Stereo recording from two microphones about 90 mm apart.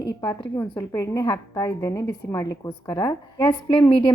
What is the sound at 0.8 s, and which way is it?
Speech, 40° left (ahead or behind).